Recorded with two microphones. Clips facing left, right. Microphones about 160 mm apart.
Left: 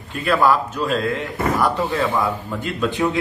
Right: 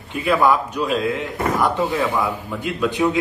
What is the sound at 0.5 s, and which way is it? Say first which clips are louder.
Speech: even; 15° right (ahead or behind).